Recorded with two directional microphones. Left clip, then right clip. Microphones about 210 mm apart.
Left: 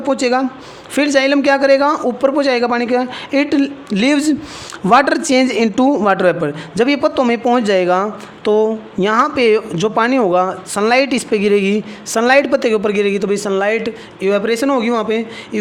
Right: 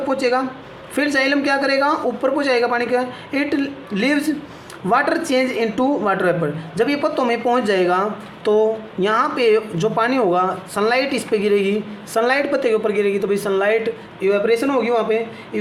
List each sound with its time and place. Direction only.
0.1 s a woman's voice: 50° left (ahead or behind)